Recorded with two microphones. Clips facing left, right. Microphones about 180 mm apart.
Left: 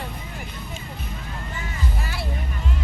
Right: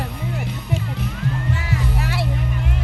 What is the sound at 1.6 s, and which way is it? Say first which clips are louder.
Music: right 7 dB; 75° right (ahead or behind).